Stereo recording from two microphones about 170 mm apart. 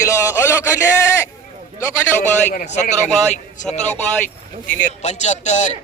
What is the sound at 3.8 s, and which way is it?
Speech, 10° left (ahead or behind).